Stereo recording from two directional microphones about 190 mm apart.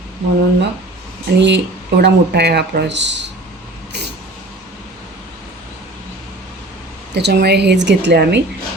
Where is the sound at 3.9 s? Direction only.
65° right (ahead or behind).